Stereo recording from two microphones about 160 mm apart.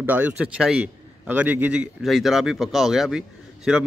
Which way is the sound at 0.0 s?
10° right (ahead or behind).